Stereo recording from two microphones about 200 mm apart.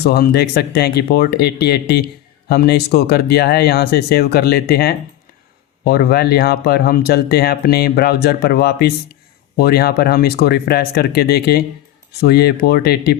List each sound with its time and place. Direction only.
0.0 s speech: 50° left (ahead or behind)